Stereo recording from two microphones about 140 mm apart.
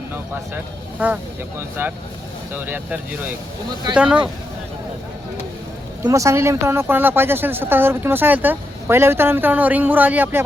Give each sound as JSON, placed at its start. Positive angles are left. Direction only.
{"t": 0.1, "sound": "speech", "side_deg": -15}
{"t": 6.1, "sound": "speech", "side_deg": -20}